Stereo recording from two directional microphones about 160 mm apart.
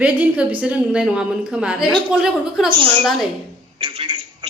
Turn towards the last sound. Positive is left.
turn(degrees=-30)  # may be behind; listen again after turning